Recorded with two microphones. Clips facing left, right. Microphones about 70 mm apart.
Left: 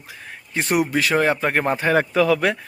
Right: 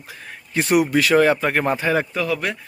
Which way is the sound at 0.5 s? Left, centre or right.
Left.